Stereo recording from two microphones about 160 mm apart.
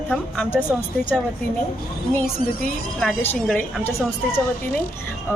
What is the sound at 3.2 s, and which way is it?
Speech, 10° left (ahead or behind).